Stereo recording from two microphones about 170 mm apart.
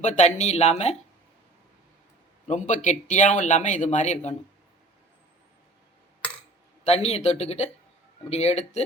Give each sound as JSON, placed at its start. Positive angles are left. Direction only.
{"t": 0.0, "sound": "speech", "side_deg": 45}
{"t": 2.5, "sound": "speech", "side_deg": 45}
{"t": 6.8, "sound": "speech", "side_deg": 40}